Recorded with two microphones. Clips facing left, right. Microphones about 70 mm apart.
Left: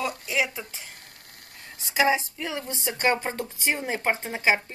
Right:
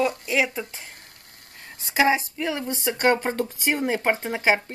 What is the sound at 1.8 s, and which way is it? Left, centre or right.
Speech, right.